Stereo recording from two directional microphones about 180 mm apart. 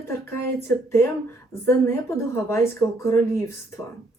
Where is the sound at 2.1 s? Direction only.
15° left (ahead or behind).